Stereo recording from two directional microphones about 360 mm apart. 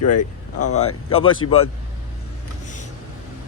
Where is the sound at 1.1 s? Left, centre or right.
Centre.